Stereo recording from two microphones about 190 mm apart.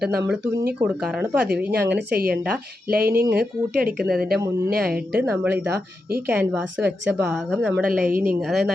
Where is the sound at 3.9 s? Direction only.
5° right (ahead or behind).